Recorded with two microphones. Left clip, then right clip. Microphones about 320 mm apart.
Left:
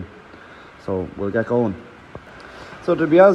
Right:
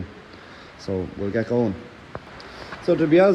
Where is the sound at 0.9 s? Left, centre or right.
Left.